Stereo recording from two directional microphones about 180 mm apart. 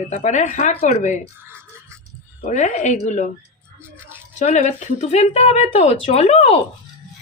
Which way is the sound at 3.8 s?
10° right (ahead or behind).